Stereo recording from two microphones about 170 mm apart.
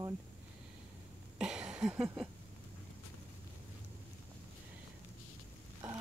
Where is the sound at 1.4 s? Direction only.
5° right (ahead or behind).